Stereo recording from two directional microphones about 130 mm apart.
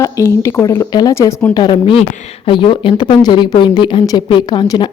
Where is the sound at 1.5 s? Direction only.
35° left (ahead or behind).